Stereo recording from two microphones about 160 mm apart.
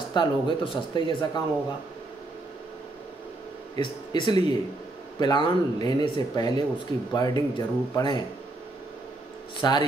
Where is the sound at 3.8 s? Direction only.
30° left (ahead or behind).